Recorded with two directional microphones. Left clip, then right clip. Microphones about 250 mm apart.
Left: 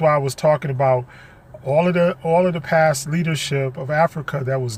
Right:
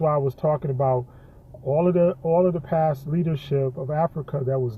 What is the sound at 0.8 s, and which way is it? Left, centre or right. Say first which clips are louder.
Speech: left 5 dB; left.